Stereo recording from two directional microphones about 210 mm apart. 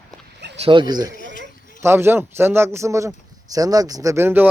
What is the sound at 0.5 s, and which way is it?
Speech, 25° right (ahead or behind).